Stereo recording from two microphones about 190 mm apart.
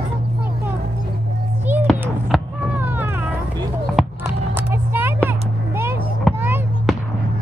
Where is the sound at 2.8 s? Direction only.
10° right (ahead or behind).